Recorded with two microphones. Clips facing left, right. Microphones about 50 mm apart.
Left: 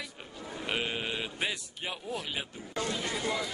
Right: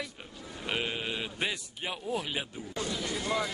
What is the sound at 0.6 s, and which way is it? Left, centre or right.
Speech, centre.